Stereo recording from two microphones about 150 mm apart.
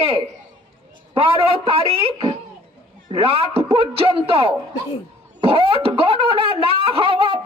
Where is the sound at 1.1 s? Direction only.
40° right (ahead or behind).